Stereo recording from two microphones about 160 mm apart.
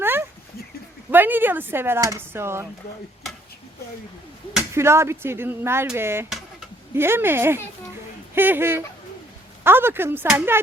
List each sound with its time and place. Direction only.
0.0 s a sound: 15° right (ahead or behind)
1.1 s speech: 10° right (ahead or behind)
4.7 s speech: 15° right (ahead or behind)